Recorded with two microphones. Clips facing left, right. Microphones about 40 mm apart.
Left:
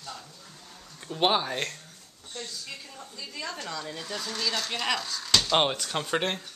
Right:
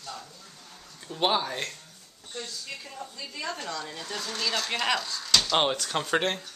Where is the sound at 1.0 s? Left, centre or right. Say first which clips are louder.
Left 1 dB; centre.